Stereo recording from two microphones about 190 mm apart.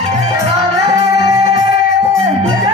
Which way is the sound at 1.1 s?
20° right (ahead or behind).